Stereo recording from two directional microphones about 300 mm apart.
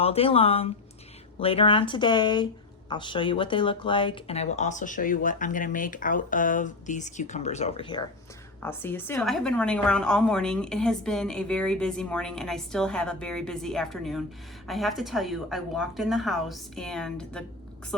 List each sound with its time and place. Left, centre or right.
0.0 s a woman's voice: centre